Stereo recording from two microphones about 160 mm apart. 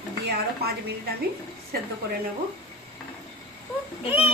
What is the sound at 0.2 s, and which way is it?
Speech, 90° right.